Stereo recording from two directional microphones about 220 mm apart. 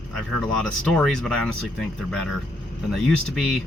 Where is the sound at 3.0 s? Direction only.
5° left (ahead or behind).